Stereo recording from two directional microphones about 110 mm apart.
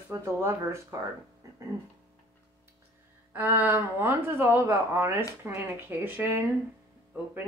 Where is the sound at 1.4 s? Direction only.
30° right (ahead or behind).